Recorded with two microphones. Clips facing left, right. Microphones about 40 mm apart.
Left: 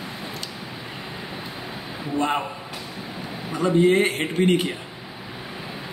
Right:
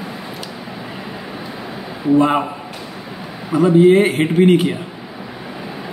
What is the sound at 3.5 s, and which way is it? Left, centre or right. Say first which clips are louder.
A man's voice: right 8 dB; centre.